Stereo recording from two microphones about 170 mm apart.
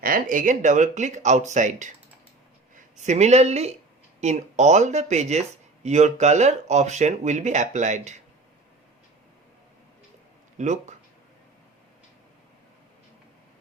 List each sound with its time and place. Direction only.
0.0 s speech: 55° right (ahead or behind)
2.9 s speech: 45° right (ahead or behind)
10.6 s speech: 45° right (ahead or behind)